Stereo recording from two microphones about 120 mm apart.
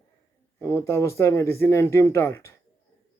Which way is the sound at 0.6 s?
25° left (ahead or behind).